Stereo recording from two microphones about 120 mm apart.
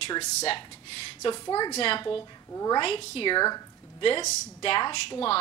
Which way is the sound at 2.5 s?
25° left (ahead or behind).